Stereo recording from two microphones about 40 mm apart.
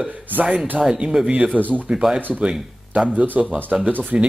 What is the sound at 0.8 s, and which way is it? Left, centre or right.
Speech, right.